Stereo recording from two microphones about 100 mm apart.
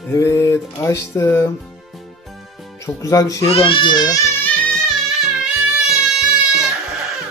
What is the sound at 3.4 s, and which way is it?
Speech, 65° left (ahead or behind).